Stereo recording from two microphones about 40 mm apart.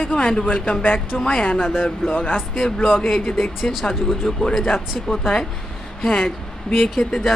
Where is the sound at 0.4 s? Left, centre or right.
Left.